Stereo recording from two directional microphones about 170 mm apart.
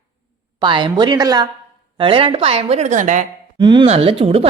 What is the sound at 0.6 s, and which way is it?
A woman's voice, 30° right (ahead or behind).